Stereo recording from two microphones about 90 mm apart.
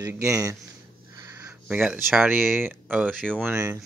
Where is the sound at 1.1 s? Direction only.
35° right (ahead or behind).